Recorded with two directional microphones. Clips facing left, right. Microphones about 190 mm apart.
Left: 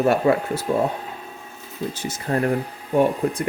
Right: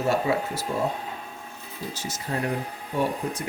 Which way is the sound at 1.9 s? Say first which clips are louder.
Left 6 dB; 60° left (ahead or behind).